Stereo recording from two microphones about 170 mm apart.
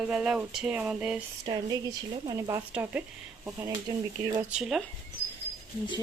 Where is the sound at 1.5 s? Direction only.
25° right (ahead or behind).